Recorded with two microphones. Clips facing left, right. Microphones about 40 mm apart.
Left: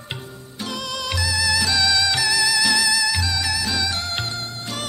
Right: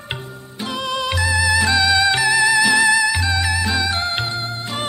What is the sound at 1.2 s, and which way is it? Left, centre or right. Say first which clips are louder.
Music: right 5 dB; right.